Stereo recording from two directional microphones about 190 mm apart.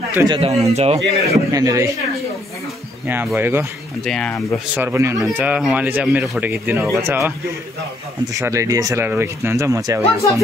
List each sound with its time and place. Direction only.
0.1 s speech: 15° right (ahead or behind)
0.4 s speech: 35° right (ahead or behind)
1.3 s speech: 20° right (ahead or behind)
3.3 s speech: 10° right (ahead or behind)
4.0 s speech: 5° left (ahead or behind)
4.7 s speech: 15° right (ahead or behind)
8.3 s speech: 15° right (ahead or behind)